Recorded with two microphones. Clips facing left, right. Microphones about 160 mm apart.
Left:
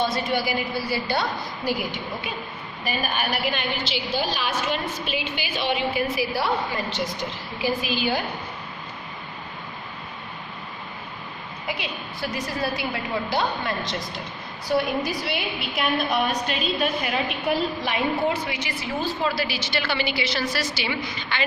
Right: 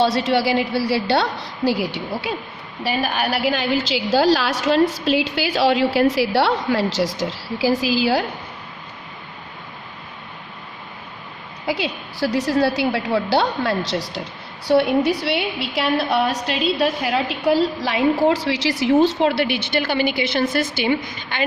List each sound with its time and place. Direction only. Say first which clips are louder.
0.0 s a woman's voice: right 6 dB; 80° right
2.8 s a woman's voice: right 5 dB; 90° right
11.6 s a woman's voice: right 8 dB; 85° right
14.7 s a woman's voice: right 7 dB; 75° right (ahead or behind)
15.7 s a woman's voice: right 4 dB; 90° right; by 21.4 s 50° right (ahead or behind)